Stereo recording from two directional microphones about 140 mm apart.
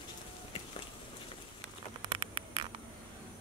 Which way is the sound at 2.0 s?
35° right (ahead or behind).